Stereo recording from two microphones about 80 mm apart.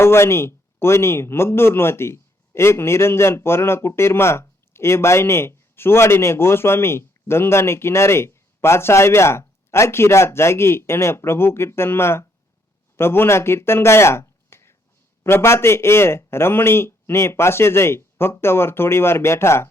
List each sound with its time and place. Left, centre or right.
0.0 s a man's voice: left